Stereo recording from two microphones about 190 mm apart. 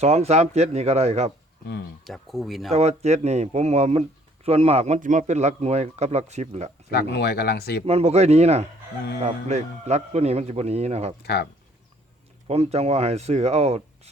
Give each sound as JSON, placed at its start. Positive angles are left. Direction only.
{"t": 0.0, "sound": "speech", "side_deg": -35}
{"t": 2.0, "sound": "speech", "side_deg": 0}
{"t": 2.7, "sound": "speech", "side_deg": -35}
{"t": 6.9, "sound": "speech", "side_deg": 60}
{"t": 7.9, "sound": "speech", "side_deg": -35}
{"t": 11.2, "sound": "speech", "side_deg": 60}
{"t": 12.5, "sound": "speech", "side_deg": -35}